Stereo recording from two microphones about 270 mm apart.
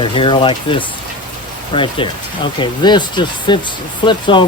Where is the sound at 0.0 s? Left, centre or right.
Centre.